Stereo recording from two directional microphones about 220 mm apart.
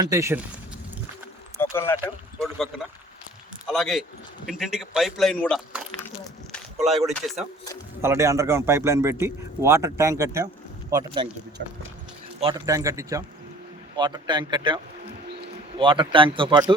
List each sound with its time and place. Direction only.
0.0 s a man's voice: 15° right (ahead or behind)
1.5 s a sound: 10° left (ahead or behind)
2.4 s a man's voice: centre (ahead or behind)
6.5 s a sound: centre (ahead or behind)
8.0 s a man's voice: 10° right (ahead or behind)
11.6 s speech: 50° right (ahead or behind)
12.4 s a man's voice: 20° right (ahead or behind)
15.8 s a man's voice: 20° right (ahead or behind)